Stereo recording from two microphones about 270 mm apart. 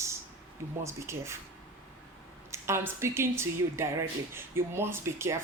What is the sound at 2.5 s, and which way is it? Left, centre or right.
Speech, centre.